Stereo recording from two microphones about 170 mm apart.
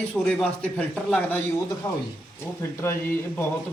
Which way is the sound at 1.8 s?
25° left (ahead or behind).